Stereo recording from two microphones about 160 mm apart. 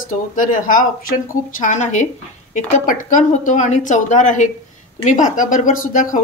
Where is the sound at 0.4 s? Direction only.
60° left (ahead or behind).